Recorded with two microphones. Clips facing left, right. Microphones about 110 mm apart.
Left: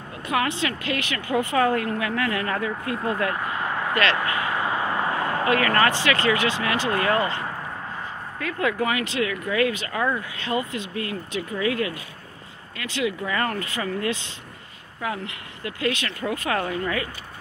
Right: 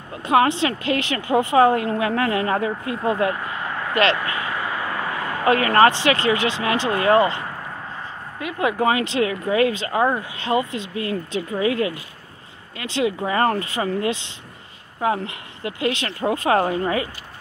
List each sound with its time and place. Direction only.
0.2 s speech: 25° right (ahead or behind)
4.3 s vehicle: 20° left (ahead or behind)
5.4 s speech: 30° right (ahead or behind)
10.3 s speech: 25° right (ahead or behind)